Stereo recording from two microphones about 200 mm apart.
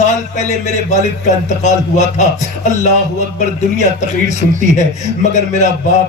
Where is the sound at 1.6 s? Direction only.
35° left (ahead or behind).